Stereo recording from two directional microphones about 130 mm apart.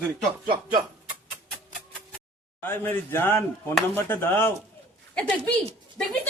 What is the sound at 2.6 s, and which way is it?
Speech, 15° left (ahead or behind).